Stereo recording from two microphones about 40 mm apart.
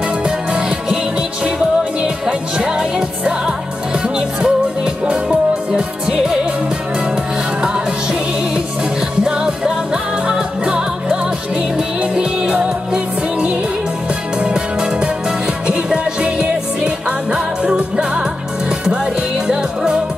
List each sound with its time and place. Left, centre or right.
0.2 s music: right
2.5 s music: centre
7.6 s music: right
9.2 s music: centre
12.6 s music: right
19.4 s music: centre